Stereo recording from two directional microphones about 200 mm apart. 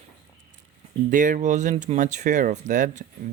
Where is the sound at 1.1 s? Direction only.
40° right (ahead or behind).